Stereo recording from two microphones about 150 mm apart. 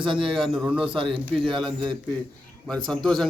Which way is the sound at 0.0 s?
35° right (ahead or behind).